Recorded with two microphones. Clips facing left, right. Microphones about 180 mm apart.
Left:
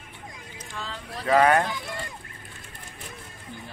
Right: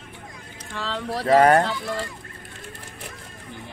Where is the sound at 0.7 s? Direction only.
90° right.